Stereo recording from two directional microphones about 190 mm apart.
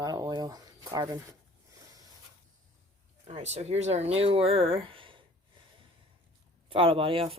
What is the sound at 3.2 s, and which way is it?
Speech, 35° right (ahead or behind).